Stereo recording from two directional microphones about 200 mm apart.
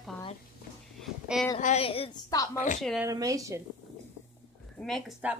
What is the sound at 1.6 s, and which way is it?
Speech, 35° left (ahead or behind).